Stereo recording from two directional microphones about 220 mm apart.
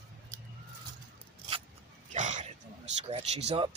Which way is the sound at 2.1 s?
35° right (ahead or behind).